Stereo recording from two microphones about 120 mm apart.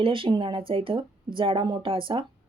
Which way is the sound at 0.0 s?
45° right (ahead or behind).